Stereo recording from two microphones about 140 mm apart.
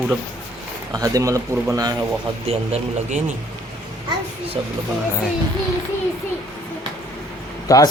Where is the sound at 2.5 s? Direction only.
55° right (ahead or behind).